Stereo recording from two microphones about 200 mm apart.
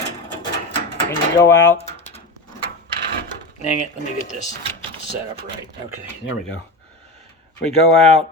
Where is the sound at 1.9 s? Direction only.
30° left (ahead or behind).